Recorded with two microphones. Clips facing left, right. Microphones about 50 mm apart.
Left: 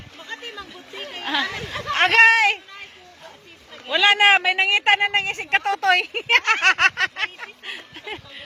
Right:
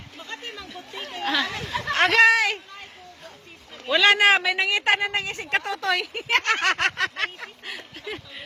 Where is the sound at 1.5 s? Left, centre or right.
Centre.